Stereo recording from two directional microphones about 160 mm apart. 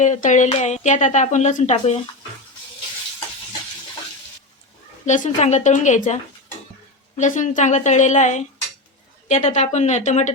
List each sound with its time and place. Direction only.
0.0 s speech: 50° left (ahead or behind)
5.0 s speech: 50° left (ahead or behind)
7.2 s speech: 50° left (ahead or behind)